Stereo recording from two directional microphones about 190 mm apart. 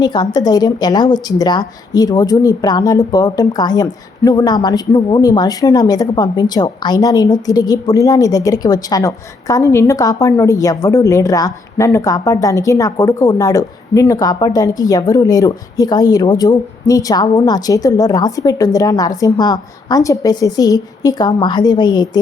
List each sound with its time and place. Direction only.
0.0 s a woman's voice: 20° left (ahead or behind)